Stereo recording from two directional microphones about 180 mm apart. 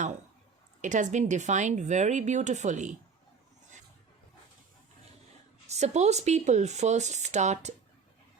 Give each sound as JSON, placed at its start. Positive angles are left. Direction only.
{"t": 0.8, "sound": "speech", "side_deg": -45}
{"t": 5.7, "sound": "speech", "side_deg": -40}